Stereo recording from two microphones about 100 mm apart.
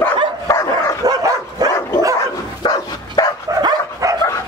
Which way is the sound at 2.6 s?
40° left (ahead or behind).